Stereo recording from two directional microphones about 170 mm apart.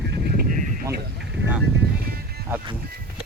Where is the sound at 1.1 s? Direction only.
90° right.